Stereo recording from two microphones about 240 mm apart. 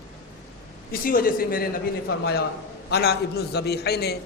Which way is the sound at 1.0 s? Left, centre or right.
Left.